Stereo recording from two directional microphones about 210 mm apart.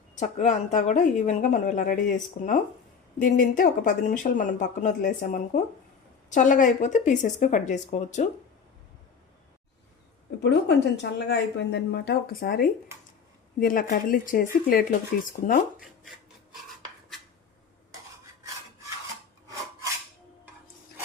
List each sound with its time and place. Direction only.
0.2 s speech: 35° left (ahead or behind)
10.4 s speech: 55° left (ahead or behind)